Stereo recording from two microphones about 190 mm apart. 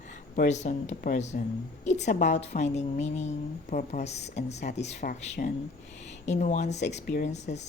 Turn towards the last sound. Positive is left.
turn(degrees=40)  # may be behind; listen again after turning